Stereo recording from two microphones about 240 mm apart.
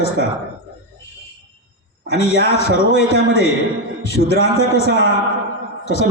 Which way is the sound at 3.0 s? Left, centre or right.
Left.